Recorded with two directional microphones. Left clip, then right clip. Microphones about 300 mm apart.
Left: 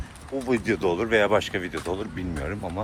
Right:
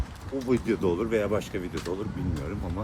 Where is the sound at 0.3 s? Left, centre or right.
Centre.